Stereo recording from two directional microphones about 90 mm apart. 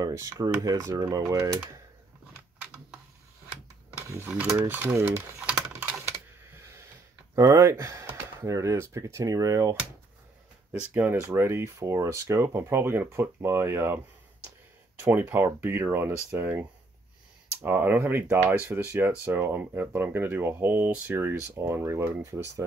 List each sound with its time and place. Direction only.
0.0 s speech: 40° right (ahead or behind)
2.6 s a sound: 10° right (ahead or behind)
4.6 s speech: 20° right (ahead or behind)
4.9 s speech: 35° right (ahead or behind)
5.7 s typing: 20° right (ahead or behind)
7.3 s speech: 40° right (ahead or behind)
10.7 s speech: 20° right (ahead or behind)
17.6 s speech: 25° right (ahead or behind)